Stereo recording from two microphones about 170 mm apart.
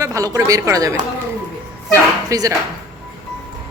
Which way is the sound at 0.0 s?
20° right (ahead or behind).